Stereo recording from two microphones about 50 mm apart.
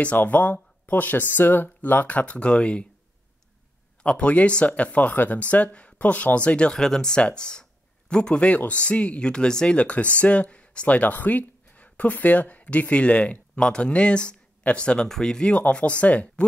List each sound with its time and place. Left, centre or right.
0.0 s speech: left
4.0 s speech: left
6.7 s speech: centre
15.0 s speech: centre
15.5 s speech: left